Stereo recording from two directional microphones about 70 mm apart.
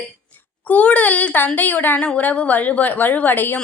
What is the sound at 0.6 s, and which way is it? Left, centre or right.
A woman's voice, left.